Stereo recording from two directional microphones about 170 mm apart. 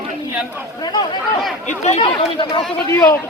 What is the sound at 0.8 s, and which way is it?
Speech, 25° left (ahead or behind).